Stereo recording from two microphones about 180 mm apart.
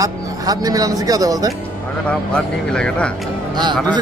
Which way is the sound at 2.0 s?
5° left (ahead or behind).